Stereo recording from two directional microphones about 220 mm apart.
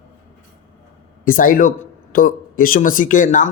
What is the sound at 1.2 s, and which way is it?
Speech, 40° left (ahead or behind).